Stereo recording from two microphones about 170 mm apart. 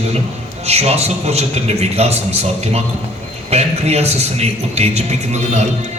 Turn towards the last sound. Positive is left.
turn(degrees=-40)  # may be behind; listen again after turning